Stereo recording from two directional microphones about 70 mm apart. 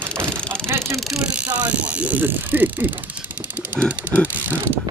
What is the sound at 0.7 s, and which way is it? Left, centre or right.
Vehicle, right.